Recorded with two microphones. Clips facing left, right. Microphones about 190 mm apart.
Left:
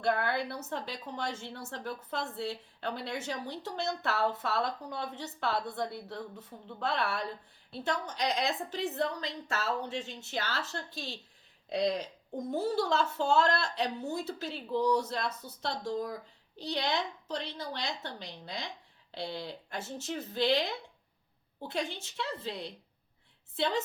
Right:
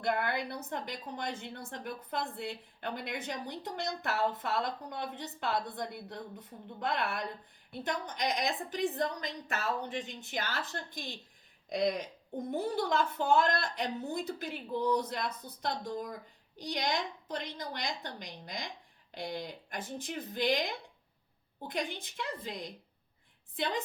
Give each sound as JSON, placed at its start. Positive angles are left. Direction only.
{"t": 0.0, "sound": "a woman's voice", "side_deg": -15}
{"t": 21.7, "sound": "a woman's voice", "side_deg": -15}